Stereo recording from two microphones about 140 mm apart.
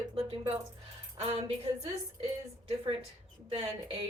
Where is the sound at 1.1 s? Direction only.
45° right (ahead or behind).